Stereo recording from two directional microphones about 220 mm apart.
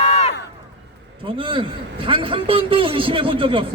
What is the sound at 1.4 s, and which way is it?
A man's voice, 25° right (ahead or behind).